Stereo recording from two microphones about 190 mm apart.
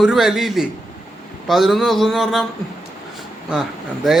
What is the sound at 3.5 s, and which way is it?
Speech, centre (ahead or behind).